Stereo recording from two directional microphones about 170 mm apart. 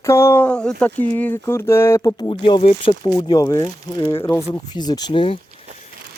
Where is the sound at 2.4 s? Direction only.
30° left (ahead or behind).